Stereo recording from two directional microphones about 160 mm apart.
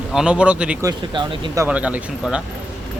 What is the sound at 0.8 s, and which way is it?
Speech, 20° right (ahead or behind).